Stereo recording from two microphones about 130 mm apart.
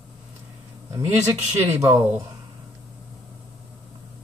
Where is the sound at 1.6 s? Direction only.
25° right (ahead or behind).